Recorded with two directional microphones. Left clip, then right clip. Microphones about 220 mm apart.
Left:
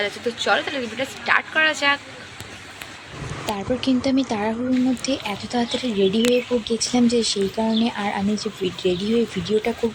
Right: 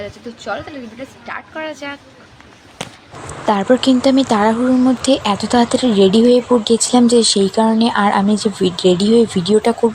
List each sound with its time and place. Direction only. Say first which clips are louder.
0.0 s speech: left 5 dB; 5° right (ahead or behind)
3.4 s speech: right 11 dB; 20° right (ahead or behind)